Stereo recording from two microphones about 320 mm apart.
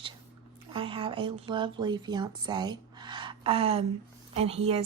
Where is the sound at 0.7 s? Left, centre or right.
Centre.